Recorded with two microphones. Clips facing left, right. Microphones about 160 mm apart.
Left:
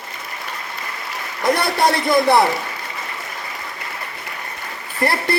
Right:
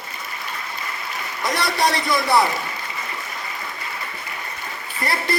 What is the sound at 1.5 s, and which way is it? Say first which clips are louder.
Speech: left 2 dB; 55° left (ahead or behind).